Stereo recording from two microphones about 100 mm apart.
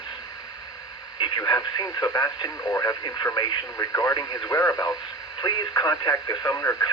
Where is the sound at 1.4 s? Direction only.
40° left (ahead or behind).